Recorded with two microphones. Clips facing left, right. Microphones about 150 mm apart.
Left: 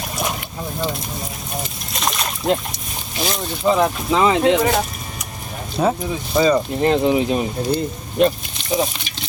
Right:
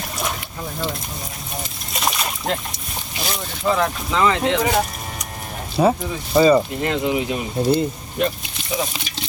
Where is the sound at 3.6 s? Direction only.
20° left (ahead or behind).